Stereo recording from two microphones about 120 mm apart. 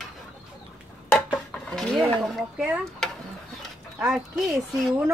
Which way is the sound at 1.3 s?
5° left (ahead or behind).